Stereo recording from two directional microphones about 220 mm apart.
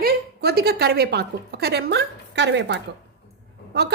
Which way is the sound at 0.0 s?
45° right (ahead or behind).